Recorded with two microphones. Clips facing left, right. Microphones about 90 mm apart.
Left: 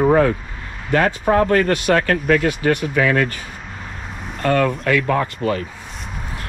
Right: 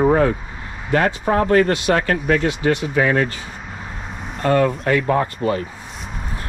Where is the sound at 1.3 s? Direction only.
45° left (ahead or behind).